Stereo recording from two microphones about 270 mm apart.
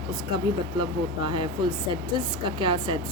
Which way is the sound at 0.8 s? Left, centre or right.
Centre.